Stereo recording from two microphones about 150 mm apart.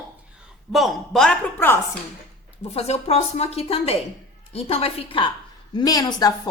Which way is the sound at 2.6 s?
45° left (ahead or behind).